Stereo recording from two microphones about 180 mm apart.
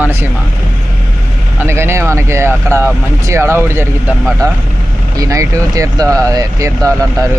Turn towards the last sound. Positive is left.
turn(degrees=-15)  # may be behind; listen again after turning